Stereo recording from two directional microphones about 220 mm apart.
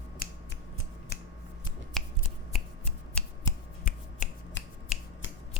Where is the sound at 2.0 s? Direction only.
Centre (ahead or behind).